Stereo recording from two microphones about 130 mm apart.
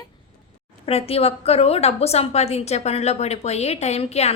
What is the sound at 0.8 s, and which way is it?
A woman's voice, 50° left (ahead or behind).